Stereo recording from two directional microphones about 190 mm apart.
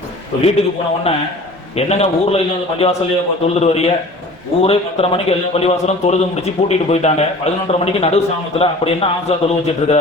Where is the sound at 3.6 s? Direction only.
35° left (ahead or behind).